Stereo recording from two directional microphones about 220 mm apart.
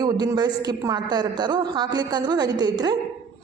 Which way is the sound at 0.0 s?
20° right (ahead or behind).